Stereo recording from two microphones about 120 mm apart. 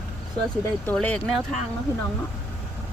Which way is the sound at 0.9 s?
10° left (ahead or behind).